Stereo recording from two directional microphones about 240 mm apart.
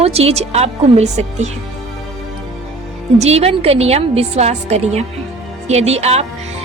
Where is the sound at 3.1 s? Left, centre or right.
Right.